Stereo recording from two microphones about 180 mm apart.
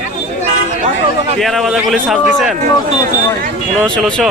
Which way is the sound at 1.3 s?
Centre (ahead or behind).